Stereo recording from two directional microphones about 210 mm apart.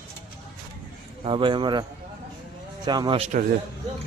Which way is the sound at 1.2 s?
25° right (ahead or behind).